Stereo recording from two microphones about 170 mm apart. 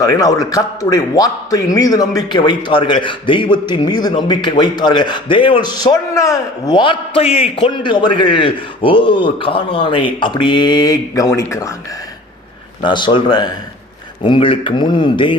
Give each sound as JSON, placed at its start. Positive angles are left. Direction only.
{"t": 0.0, "sound": "a man's voice", "side_deg": 20}
{"t": 12.8, "sound": "a man's voice", "side_deg": 25}